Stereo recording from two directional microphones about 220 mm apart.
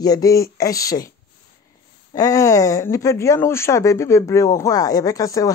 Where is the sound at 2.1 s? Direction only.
15° left (ahead or behind).